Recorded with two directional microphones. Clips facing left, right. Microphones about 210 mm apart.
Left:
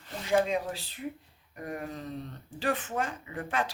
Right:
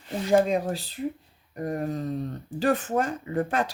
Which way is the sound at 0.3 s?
40° right (ahead or behind).